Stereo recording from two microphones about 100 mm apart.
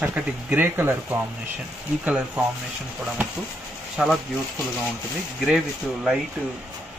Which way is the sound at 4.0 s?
5° right (ahead or behind).